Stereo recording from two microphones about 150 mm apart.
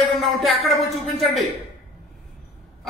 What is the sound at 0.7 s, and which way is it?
Speech, centre (ahead or behind).